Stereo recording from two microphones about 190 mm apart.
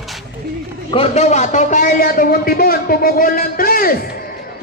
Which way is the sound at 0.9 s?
35° left (ahead or behind).